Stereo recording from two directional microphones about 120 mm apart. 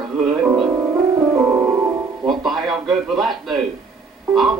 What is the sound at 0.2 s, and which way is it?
Music, 5° right (ahead or behind).